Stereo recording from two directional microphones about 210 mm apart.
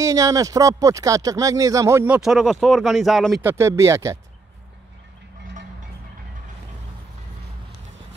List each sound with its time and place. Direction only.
0.0 s speech: 15° right (ahead or behind); by 3.3 s centre (ahead or behind)
3.3 s speech: 15° right (ahead or behind)